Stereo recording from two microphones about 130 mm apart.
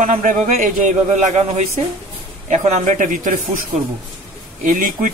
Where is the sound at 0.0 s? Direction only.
80° right.